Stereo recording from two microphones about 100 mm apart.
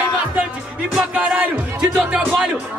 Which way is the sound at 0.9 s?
10° right (ahead or behind).